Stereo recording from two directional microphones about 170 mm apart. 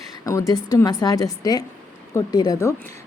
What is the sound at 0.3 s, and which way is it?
A woman's voice, 20° left (ahead or behind).